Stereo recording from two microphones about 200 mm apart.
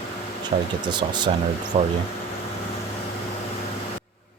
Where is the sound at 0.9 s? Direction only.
20° right (ahead or behind).